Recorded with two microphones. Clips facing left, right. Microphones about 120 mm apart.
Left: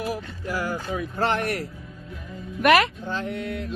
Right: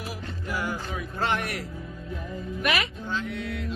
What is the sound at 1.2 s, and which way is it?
Music, 45° left (ahead or behind).